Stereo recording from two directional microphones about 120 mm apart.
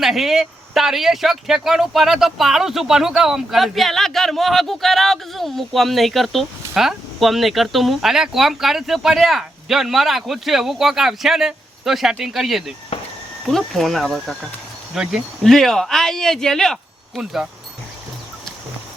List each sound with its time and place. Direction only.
0.0 s speech: centre (ahead or behind)
12.9 s cricket: 50° left (ahead or behind)
13.5 s speech: centre (ahead or behind)